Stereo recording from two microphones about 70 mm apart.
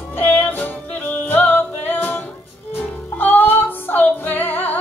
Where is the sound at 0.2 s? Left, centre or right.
Left.